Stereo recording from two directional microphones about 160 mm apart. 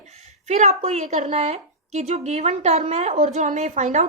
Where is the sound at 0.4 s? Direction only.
45° right (ahead or behind).